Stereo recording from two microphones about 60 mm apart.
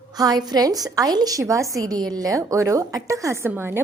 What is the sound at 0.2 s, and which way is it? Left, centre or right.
A woman's voice, right.